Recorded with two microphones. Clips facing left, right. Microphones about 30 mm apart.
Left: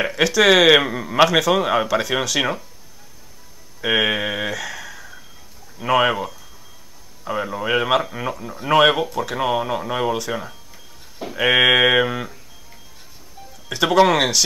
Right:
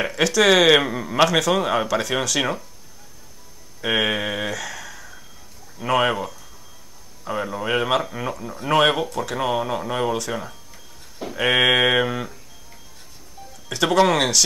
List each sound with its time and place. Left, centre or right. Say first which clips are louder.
0.0 s speech: left 2 dB; centre
3.8 s speech: left 2 dB; centre
13.7 s speech: left 2 dB; centre